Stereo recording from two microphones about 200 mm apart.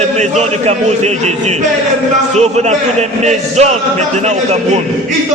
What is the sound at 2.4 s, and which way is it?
A man's voice, 35° right (ahead or behind).